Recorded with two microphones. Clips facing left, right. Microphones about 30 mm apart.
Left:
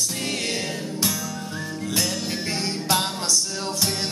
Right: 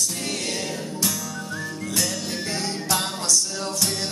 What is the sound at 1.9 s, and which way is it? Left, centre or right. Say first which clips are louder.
Music: left 1 dB; centre.